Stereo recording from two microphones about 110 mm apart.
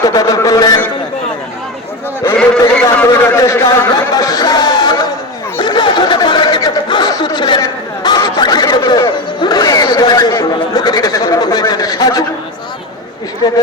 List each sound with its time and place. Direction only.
0.0 s a sound: 30° left (ahead or behind)
2.2 s a man's voice: 15° left (ahead or behind)
3.2 s speech: 25° left (ahead or behind)
5.5 s chatter: 45° left (ahead or behind)
6.8 s snicker: 45° left (ahead or behind)
7.2 s speech: 45° left (ahead or behind)
8.0 s snicker: 40° left (ahead or behind)
8.9 s speech: 45° left (ahead or behind)